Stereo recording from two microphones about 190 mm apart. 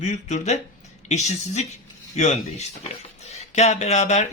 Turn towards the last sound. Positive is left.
turn(degrees=35)  # may be behind; listen again after turning